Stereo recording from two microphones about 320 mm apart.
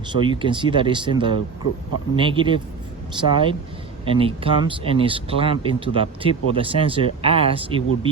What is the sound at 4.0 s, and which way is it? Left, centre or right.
Speech, centre.